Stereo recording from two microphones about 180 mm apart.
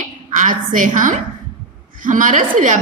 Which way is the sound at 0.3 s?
45° right (ahead or behind).